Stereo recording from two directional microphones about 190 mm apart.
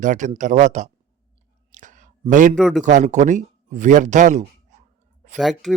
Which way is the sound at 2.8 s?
40° right (ahead or behind).